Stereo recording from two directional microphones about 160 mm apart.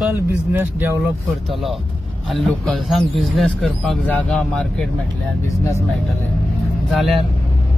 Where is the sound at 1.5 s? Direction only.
Centre (ahead or behind).